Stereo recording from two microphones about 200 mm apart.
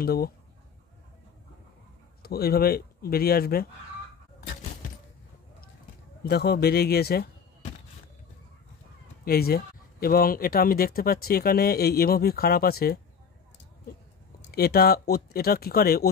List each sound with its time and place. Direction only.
0.0 s speech: 50° left (ahead or behind)
2.2 s speech: 50° left (ahead or behind)
6.2 s speech: 55° left (ahead or behind)
9.2 s speech: 50° left (ahead or behind)
14.5 s speech: 50° left (ahead or behind)